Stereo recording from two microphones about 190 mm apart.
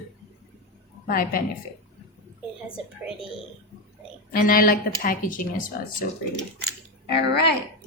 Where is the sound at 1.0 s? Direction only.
50° left (ahead or behind).